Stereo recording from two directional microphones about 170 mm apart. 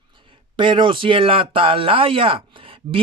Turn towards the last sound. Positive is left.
turn(degrees=-30)  # may be behind; listen again after turning